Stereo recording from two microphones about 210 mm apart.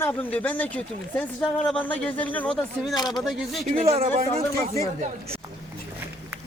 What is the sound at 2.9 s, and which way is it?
Speech, 20° left (ahead or behind).